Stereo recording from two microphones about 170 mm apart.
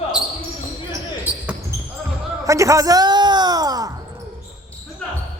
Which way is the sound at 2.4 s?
20° right (ahead or behind).